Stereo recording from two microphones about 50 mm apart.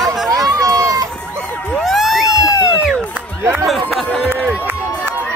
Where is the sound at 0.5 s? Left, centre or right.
Right.